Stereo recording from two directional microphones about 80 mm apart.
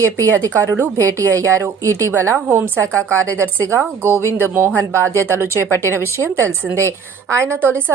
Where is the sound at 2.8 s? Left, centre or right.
Right.